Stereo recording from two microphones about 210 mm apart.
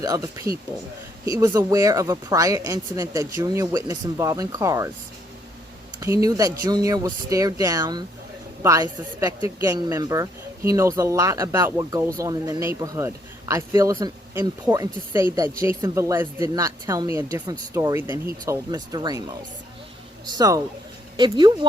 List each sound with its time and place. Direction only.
0.0 s a woman's voice: 15° right (ahead or behind)
6.0 s a woman's voice: 15° right (ahead or behind)